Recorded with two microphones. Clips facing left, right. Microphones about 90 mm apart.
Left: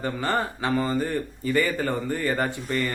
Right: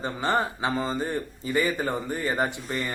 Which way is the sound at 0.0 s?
20° right (ahead or behind).